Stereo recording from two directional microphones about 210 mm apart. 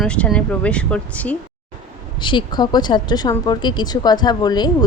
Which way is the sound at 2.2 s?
20° left (ahead or behind).